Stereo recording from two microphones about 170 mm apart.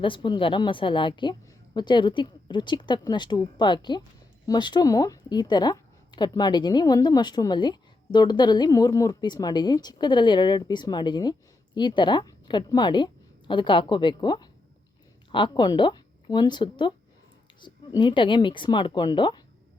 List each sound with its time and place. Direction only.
0.0 s a woman's voice: 30° left (ahead or behind)